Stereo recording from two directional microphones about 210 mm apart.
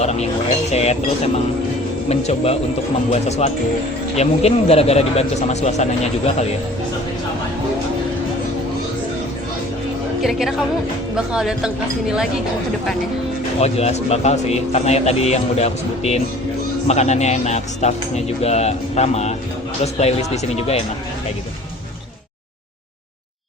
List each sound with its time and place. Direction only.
0.0 s speech: 30° left (ahead or behind)
2.0 s speech: 30° left (ahead or behind)
10.2 s speech: centre (ahead or behind)
13.6 s speech: 30° left (ahead or behind)